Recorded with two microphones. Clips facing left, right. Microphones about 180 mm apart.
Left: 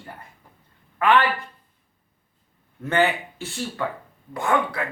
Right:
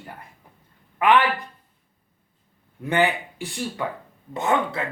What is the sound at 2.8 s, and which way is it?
Speech, 15° right (ahead or behind).